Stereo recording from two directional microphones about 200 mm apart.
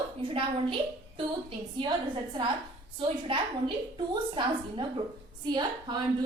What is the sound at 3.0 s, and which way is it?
A woman's voice, 25° right (ahead or behind).